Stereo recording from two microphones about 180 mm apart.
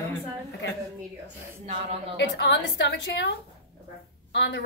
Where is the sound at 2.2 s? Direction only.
75° left (ahead or behind).